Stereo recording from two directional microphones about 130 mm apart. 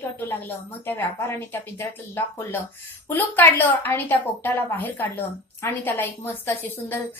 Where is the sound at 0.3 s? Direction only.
15° left (ahead or behind).